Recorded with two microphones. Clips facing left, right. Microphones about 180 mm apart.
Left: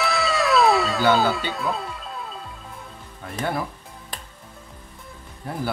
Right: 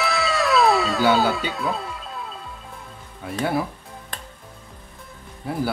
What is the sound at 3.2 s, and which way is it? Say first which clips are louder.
Speech: right 3 dB; 5° right (ahead or behind).